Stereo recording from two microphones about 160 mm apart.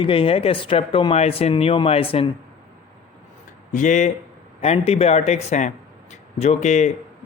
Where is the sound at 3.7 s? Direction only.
50° left (ahead or behind).